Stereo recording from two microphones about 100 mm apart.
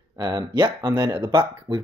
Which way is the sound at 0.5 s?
45° right (ahead or behind).